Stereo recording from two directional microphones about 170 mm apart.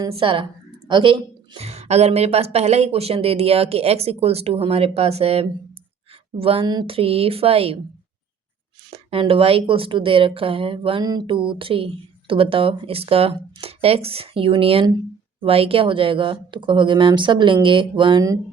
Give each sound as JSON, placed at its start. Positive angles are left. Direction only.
{"t": 0.1, "sound": "speech", "side_deg": -30}
{"t": 8.9, "sound": "speech", "side_deg": -35}